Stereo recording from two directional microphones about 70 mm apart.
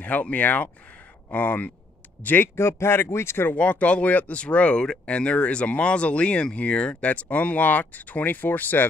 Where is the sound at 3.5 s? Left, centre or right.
Centre.